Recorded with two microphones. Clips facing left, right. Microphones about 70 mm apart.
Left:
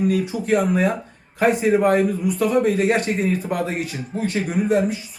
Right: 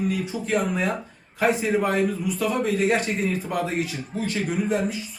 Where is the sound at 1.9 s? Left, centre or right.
Left.